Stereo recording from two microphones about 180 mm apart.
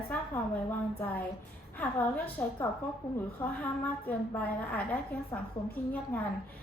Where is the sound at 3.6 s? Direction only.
10° left (ahead or behind).